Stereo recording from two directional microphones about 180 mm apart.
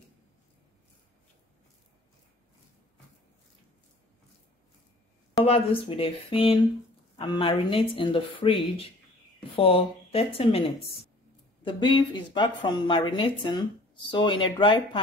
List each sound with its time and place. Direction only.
5.4 s speech: 30° left (ahead or behind)
7.2 s a woman's voice: 30° left (ahead or behind)